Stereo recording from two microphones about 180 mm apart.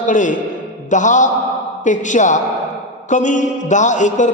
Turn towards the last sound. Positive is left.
turn(degrees=45)  # may be behind; listen again after turning